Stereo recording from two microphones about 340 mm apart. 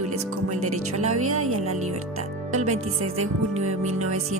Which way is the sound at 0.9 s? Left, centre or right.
Right.